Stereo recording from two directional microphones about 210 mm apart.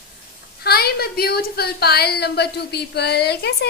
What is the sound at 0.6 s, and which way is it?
A woman's voice, 45° left (ahead or behind).